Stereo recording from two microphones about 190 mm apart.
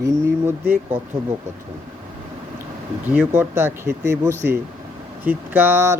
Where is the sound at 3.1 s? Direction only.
10° right (ahead or behind).